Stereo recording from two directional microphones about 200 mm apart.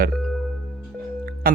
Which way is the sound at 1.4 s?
45° right (ahead or behind).